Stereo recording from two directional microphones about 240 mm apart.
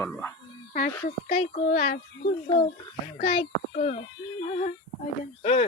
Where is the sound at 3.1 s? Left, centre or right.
Left.